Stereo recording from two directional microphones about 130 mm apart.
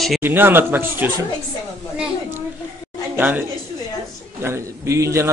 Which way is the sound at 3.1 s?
15° right (ahead or behind).